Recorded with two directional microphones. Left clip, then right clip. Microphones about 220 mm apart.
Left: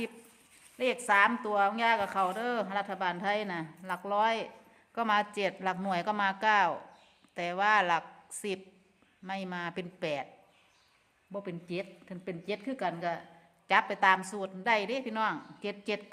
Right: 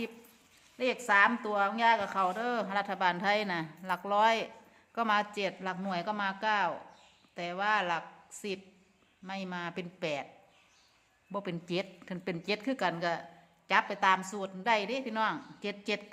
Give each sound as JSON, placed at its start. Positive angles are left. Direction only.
{"t": 0.8, "sound": "a woman's voice", "side_deg": 10}
{"t": 11.3, "sound": "a woman's voice", "side_deg": -10}
{"t": 13.7, "sound": "a woman's voice", "side_deg": 10}